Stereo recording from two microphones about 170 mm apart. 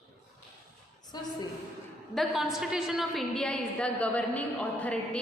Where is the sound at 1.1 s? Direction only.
25° left (ahead or behind).